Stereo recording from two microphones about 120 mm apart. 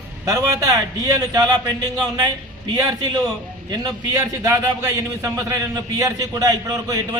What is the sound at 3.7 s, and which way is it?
A man's voice, 30° right (ahead or behind).